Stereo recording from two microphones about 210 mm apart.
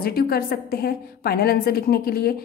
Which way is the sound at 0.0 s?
45° left (ahead or behind).